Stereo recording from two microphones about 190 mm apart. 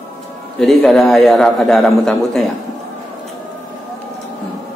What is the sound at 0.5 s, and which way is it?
A man's voice, centre (ahead or behind).